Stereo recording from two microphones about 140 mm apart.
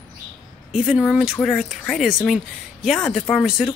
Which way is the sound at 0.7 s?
5° right (ahead or behind).